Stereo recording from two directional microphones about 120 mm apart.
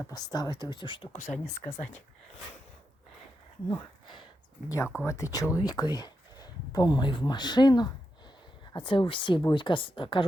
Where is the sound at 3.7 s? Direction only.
40° left (ahead or behind).